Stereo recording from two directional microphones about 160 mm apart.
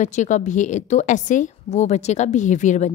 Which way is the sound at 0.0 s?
50° left (ahead or behind).